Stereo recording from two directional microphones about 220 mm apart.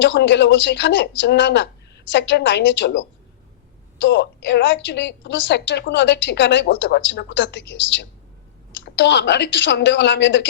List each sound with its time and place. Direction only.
0.0 s a woman's voice: 55° left (ahead or behind)